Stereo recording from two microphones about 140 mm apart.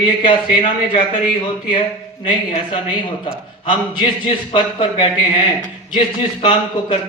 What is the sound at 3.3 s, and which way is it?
A man's voice, 35° left (ahead or behind).